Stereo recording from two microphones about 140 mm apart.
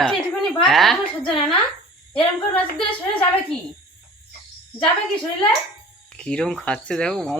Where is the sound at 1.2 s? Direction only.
35° left (ahead or behind).